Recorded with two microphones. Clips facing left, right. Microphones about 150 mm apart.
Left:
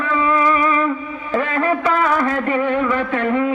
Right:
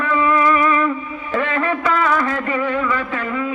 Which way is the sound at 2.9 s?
60° left (ahead or behind).